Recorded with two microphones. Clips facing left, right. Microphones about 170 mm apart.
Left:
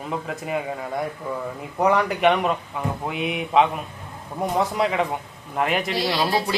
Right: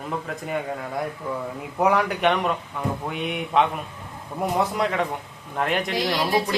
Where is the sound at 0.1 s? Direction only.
5° left (ahead or behind).